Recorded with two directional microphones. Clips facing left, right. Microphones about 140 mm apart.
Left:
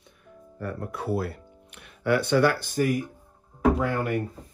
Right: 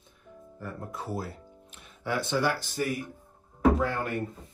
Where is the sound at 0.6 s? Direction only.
70° left (ahead or behind).